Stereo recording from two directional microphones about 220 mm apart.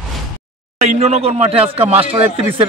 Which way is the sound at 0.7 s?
30° right (ahead or behind).